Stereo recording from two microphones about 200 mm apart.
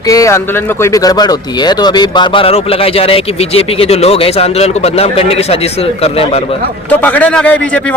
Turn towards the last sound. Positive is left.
turn(degrees=5)  # may be behind; listen again after turning